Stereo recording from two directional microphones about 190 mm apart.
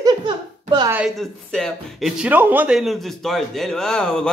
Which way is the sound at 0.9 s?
5° right (ahead or behind).